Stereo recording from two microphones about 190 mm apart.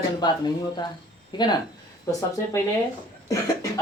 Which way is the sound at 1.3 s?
25° left (ahead or behind).